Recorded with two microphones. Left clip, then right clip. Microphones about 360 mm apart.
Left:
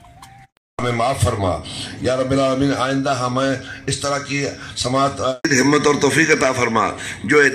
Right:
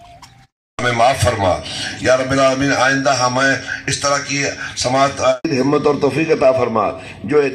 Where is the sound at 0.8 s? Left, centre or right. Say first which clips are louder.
Right 6 dB; right.